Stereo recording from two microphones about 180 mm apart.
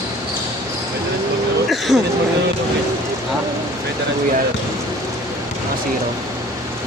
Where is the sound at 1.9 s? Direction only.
5° right (ahead or behind).